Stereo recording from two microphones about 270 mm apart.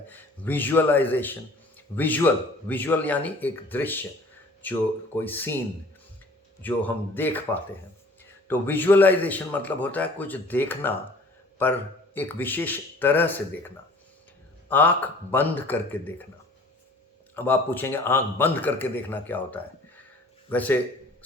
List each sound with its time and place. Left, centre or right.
0.1 s speech: centre
6.6 s speech: centre
12.1 s speech: centre
17.3 s a man's voice: centre